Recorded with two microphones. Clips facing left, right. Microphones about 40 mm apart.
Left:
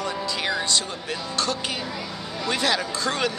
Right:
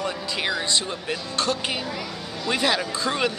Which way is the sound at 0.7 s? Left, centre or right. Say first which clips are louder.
Right 1 dB; right.